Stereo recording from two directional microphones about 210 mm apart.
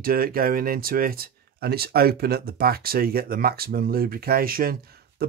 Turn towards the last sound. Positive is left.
turn(degrees=-45)  # may be behind; listen again after turning